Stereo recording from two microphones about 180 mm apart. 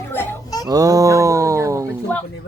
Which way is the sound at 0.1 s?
10° left (ahead or behind).